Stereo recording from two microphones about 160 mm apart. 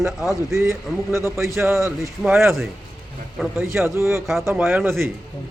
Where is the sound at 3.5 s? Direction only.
15° right (ahead or behind).